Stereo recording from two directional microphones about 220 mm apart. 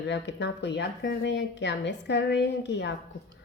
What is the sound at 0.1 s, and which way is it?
A woman's voice, 55° left (ahead or behind).